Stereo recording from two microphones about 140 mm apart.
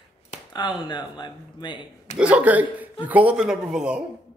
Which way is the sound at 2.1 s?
10° right (ahead or behind).